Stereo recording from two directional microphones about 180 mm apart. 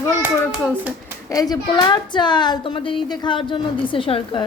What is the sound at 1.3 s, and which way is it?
A woman's voice, 20° left (ahead or behind).